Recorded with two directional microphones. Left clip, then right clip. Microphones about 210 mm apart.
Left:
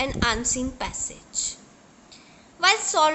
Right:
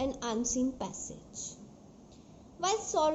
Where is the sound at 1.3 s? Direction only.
10° left (ahead or behind).